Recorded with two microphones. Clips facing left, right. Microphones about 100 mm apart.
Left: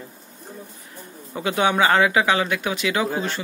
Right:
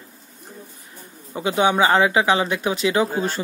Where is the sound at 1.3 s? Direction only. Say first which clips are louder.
Right 2 dB; 20° right (ahead or behind).